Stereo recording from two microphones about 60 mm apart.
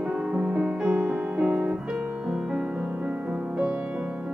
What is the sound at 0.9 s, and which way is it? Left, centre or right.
Music, right.